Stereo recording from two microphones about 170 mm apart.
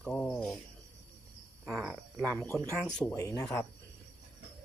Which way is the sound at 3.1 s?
20° left (ahead or behind).